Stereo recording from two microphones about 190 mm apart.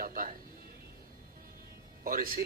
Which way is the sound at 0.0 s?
45° right (ahead or behind).